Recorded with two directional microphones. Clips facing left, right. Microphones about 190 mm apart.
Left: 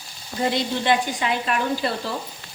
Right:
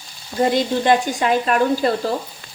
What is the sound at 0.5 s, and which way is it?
Speech, 45° right (ahead or behind).